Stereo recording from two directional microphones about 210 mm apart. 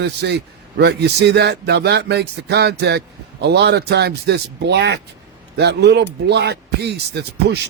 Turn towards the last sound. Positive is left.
turn(degrees=-55)  # may be behind; listen again after turning